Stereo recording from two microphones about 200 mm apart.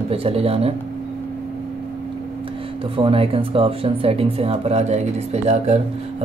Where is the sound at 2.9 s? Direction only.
30° right (ahead or behind).